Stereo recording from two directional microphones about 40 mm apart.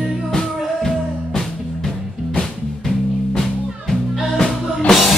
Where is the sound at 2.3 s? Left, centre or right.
Centre.